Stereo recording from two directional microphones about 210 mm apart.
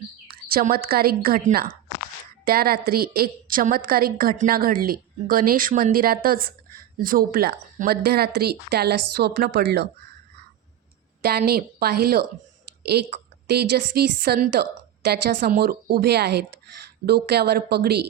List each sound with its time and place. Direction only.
0.3 s a woman's voice: 45° right (ahead or behind)
11.2 s a woman's voice: 50° right (ahead or behind)